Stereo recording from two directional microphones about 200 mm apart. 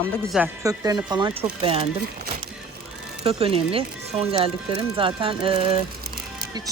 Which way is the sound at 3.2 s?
30° right (ahead or behind).